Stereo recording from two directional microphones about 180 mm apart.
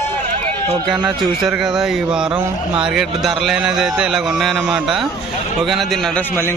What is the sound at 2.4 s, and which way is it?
Speech, 20° right (ahead or behind).